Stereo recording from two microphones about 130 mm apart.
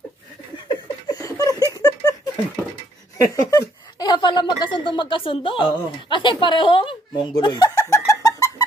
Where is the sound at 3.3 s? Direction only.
25° left (ahead or behind).